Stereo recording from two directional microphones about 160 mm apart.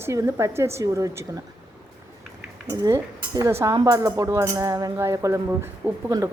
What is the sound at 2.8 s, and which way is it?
Speech, 20° right (ahead or behind).